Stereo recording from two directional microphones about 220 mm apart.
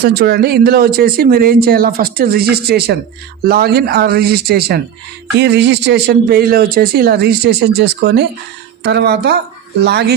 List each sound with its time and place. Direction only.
0.0 s speech: 45° right (ahead or behind)